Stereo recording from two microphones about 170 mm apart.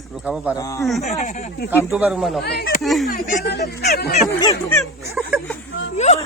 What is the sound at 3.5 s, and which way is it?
Speech, 75° left (ahead or behind).